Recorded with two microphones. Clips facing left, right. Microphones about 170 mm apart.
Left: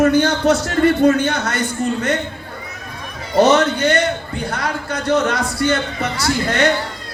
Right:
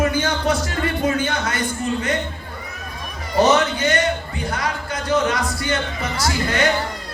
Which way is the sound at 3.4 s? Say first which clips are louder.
Left 3 dB; 65° left (ahead or behind).